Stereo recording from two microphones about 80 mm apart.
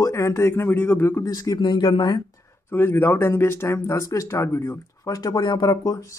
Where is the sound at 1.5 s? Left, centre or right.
Left.